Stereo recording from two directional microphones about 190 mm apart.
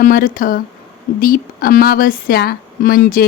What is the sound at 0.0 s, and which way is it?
Speech, 45° left (ahead or behind).